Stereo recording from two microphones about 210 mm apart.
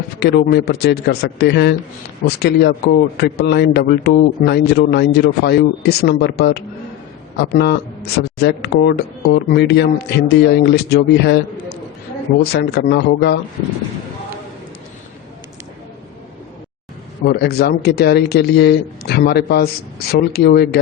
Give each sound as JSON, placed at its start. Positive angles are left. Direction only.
{"t": 0.2, "sound": "a man's voice", "side_deg": 50}
{"t": 17.2, "sound": "a man's voice", "side_deg": 50}